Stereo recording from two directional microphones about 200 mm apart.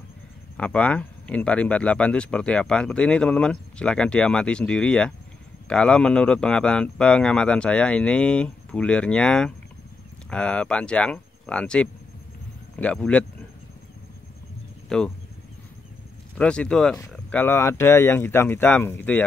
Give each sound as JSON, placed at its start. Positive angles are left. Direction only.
{"t": 0.6, "sound": "speech", "side_deg": 5}
{"t": 14.9, "sound": "speech", "side_deg": 5}
{"t": 16.3, "sound": "speech", "side_deg": 5}